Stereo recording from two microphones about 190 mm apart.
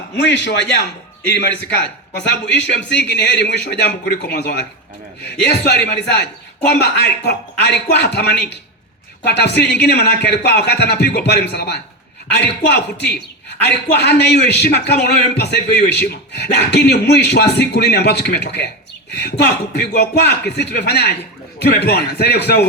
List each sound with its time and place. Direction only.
0.2 s a man's voice: 70° left (ahead or behind)